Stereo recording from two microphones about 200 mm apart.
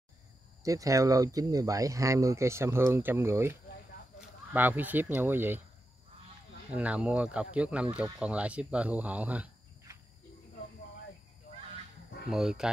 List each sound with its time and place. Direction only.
0.7 s speech: 15° right (ahead or behind)
6.7 s speech: 5° right (ahead or behind)
12.3 s speech: centre (ahead or behind)